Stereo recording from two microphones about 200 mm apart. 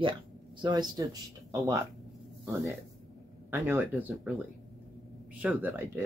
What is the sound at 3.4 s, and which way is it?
Speech, 10° right (ahead or behind).